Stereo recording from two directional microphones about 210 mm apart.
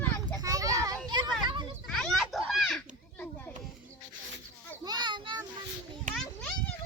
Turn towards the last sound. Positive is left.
turn(degrees=5)  # may be behind; listen again after turning